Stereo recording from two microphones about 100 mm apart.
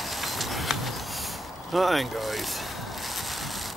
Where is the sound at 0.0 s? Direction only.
Centre (ahead or behind).